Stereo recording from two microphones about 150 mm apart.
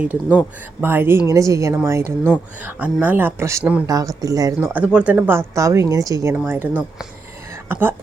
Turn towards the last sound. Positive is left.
turn(degrees=-15)  # may be behind; listen again after turning